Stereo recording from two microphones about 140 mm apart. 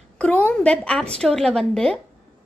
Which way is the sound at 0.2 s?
10° left (ahead or behind).